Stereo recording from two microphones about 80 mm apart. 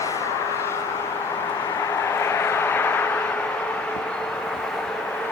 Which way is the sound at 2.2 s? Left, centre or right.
Left.